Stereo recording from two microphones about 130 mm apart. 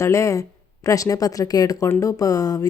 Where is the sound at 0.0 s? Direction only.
25° left (ahead or behind).